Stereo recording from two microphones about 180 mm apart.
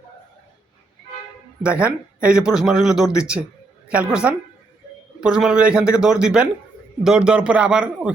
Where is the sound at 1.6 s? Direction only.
5° right (ahead or behind).